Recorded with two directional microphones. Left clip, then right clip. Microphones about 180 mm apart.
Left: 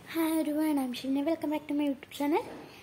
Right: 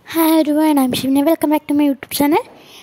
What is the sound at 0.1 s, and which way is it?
Speech, 70° right (ahead or behind).